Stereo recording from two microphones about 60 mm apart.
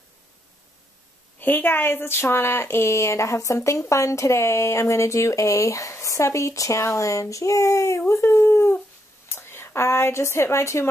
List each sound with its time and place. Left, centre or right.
1.4 s speech: left
8.1 s a woman's voice: left